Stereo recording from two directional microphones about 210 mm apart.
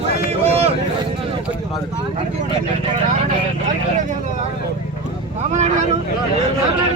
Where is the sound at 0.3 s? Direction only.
30° right (ahead or behind).